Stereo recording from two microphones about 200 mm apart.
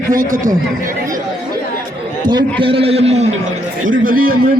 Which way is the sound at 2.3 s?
25° right (ahead or behind).